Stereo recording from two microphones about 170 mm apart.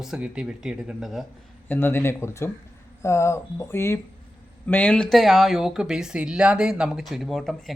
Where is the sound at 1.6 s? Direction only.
10° left (ahead or behind).